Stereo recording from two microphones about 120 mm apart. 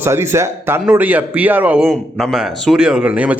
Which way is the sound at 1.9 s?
Centre (ahead or behind).